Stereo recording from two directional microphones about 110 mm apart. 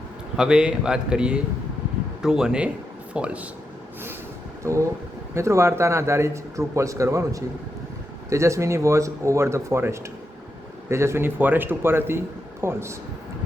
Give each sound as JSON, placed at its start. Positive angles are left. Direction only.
{"t": 0.3, "sound": "a man's voice", "side_deg": -5}
{"t": 4.6, "sound": "speech", "side_deg": -25}